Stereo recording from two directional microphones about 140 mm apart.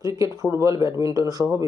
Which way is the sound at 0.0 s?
25° right (ahead or behind).